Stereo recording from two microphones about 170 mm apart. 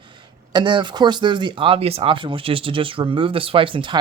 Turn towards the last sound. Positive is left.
turn(degrees=-30)  # may be behind; listen again after turning